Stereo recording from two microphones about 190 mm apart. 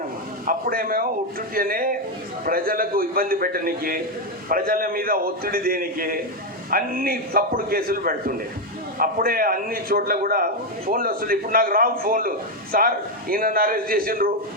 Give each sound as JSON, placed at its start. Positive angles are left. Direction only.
{"t": 0.4, "sound": "a man's voice", "side_deg": -50}